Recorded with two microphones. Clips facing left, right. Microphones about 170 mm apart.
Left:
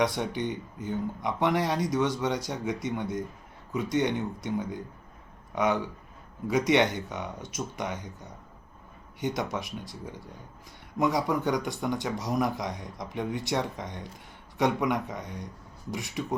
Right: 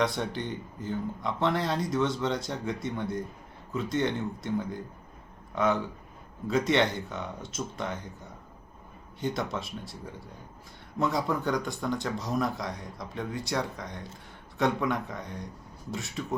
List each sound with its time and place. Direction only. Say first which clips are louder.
0.0 s speech: left 2 dB; 15° left (ahead or behind)
6.5 s speech: left 2 dB; 15° left (ahead or behind)
9.2 s speech: left 1 dB; 15° left (ahead or behind)